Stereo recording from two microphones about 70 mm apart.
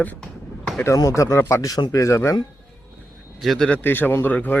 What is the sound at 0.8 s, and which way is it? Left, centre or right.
Speech, left.